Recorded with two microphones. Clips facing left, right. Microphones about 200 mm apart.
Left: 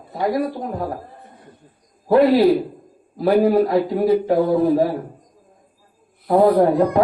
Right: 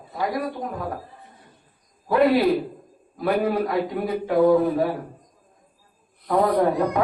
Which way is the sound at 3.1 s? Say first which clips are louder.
Left 7 dB; 30° left (ahead or behind).